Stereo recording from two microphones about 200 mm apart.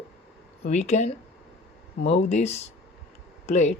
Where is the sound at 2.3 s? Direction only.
35° left (ahead or behind).